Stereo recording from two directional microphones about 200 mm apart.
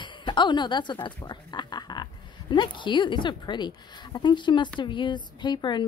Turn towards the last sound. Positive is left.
turn(degrees=20)  # may be behind; listen again after turning